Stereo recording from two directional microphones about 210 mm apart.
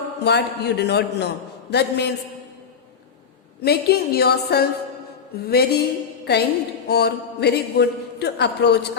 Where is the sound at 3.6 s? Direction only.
50° left (ahead or behind).